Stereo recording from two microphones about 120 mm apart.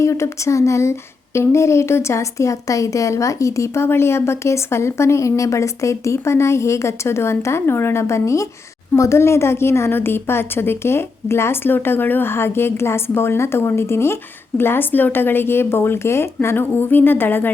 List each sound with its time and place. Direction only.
0.0 s speech: 25° left (ahead or behind)